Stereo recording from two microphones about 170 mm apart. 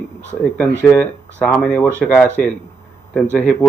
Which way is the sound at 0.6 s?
10° left (ahead or behind).